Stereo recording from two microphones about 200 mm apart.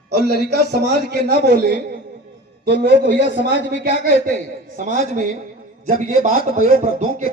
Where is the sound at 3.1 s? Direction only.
65° left (ahead or behind).